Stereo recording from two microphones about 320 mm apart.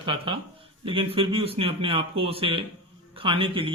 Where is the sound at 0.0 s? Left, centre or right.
Centre.